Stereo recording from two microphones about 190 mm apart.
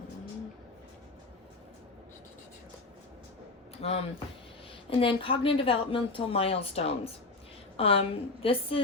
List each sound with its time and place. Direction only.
3.8 s a woman's voice: 30° left (ahead or behind)